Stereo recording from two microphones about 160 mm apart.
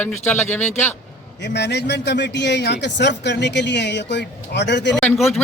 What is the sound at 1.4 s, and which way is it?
A man's voice, 90° left.